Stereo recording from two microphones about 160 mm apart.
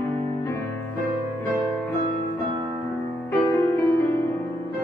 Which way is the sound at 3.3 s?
15° left (ahead or behind).